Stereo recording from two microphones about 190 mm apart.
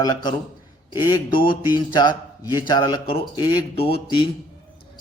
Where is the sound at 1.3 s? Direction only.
50° left (ahead or behind).